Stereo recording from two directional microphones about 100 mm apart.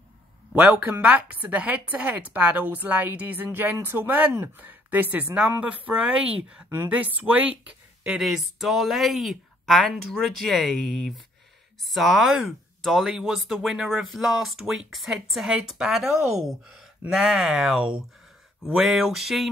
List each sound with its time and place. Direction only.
0.5 s a woman's voice: 15° right (ahead or behind)
8.2 s speech: centre (ahead or behind)